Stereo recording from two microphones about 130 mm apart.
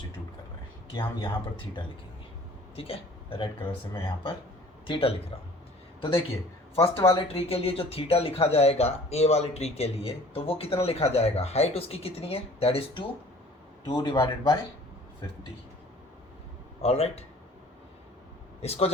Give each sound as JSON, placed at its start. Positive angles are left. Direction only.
{"t": 0.9, "sound": "a man's voice", "side_deg": 40}
{"t": 16.8, "sound": "speech", "side_deg": 55}
{"t": 18.6, "sound": "speech", "side_deg": 50}